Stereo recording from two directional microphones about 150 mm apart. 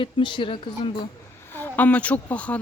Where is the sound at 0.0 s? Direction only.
30° left (ahead or behind).